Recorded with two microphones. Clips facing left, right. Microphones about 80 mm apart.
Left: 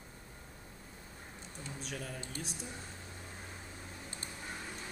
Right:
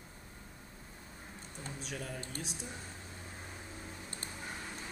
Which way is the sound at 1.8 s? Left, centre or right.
Centre.